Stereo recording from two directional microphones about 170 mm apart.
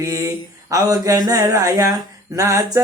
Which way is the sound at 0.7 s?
20° right (ahead or behind).